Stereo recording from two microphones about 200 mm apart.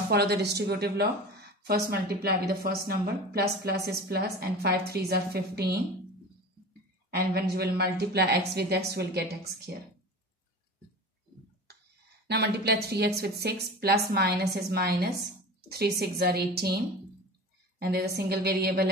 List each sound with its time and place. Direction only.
0.1 s a woman's voice: 55° right (ahead or behind)
7.2 s a woman's voice: 50° right (ahead or behind)
12.3 s a woman's voice: 55° right (ahead or behind)